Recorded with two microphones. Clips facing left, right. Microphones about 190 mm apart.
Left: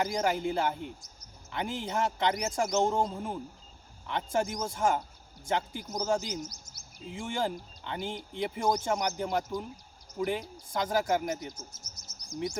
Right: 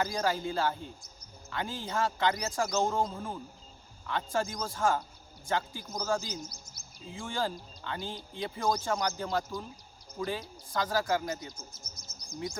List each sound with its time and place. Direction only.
0.0 s speech: 20° left (ahead or behind)
11.5 s chirp: 45° left (ahead or behind)